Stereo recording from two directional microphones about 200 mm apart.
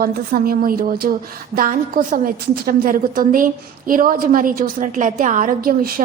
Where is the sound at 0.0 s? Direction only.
45° right (ahead or behind).